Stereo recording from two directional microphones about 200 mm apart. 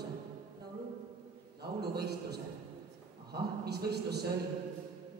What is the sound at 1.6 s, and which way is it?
A man's voice, 55° right (ahead or behind).